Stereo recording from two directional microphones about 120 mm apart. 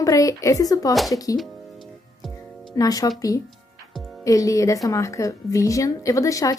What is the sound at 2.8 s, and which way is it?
A woman's voice, 30° left (ahead or behind).